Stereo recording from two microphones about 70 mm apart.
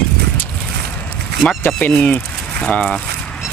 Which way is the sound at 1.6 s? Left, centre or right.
Left.